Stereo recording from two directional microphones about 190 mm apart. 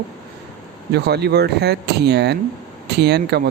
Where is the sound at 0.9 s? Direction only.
60° right (ahead or behind).